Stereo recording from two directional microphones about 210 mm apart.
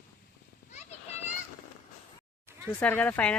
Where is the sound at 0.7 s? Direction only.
30° left (ahead or behind).